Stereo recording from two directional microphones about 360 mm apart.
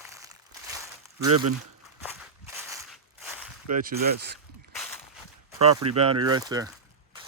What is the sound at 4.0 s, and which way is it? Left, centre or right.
Speech, right.